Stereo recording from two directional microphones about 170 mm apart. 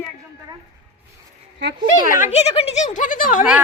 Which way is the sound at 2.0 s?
55° left (ahead or behind).